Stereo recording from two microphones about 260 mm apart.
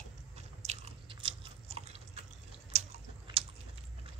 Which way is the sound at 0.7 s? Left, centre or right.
Right.